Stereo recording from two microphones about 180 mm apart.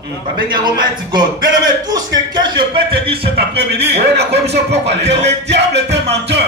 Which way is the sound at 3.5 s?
65° right (ahead or behind).